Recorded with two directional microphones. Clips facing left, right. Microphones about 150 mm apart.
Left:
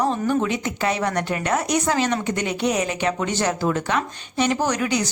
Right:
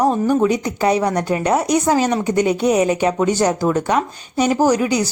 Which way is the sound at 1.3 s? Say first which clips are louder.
Right 6 dB; 30° right (ahead or behind).